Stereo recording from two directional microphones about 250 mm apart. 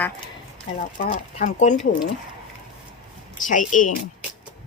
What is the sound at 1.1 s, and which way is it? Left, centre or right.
Speech, left.